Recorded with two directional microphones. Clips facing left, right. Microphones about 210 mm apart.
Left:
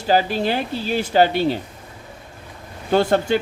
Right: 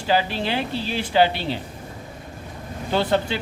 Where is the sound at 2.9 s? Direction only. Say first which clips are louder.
Left 5 dB; 45° left (ahead or behind).